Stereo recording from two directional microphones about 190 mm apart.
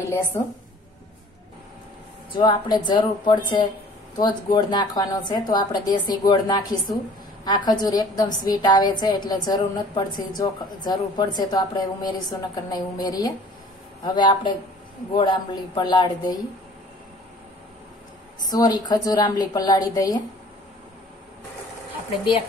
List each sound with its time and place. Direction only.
0.3 s a woman's voice: 35° left (ahead or behind)
2.3 s a woman's voice: 20° left (ahead or behind)
18.5 s a woman's voice: 20° left (ahead or behind)